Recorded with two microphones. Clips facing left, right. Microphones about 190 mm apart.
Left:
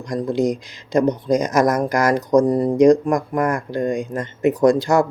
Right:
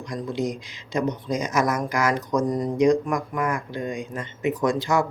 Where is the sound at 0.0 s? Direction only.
40° left (ahead or behind).